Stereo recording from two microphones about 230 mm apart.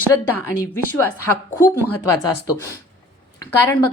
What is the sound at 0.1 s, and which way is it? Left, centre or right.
Speech, centre.